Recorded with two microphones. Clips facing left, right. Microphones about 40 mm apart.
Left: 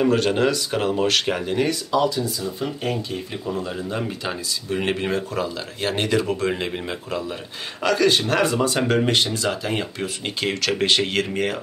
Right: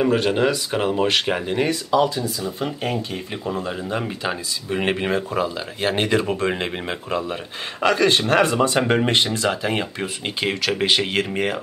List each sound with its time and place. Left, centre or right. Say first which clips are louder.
0.0 s speech: even; centre; by 2.9 s right
3.6 s speech: right 1 dB; centre
10.2 s speech: right 1 dB; centre